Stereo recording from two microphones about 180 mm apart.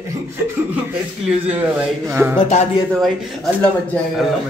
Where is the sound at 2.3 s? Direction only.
40° left (ahead or behind).